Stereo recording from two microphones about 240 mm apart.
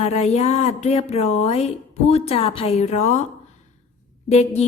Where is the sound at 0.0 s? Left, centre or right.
Left.